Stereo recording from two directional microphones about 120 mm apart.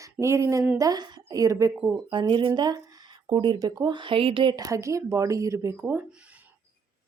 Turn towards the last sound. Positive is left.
turn(degrees=-20)  # may be behind; listen again after turning